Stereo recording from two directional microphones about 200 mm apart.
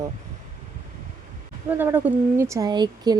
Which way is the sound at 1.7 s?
10° right (ahead or behind).